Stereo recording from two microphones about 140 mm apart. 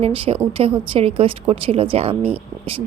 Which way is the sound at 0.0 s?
45° right (ahead or behind).